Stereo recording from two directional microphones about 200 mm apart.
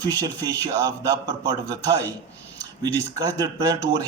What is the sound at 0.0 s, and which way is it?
A man's voice, 20° right (ahead or behind).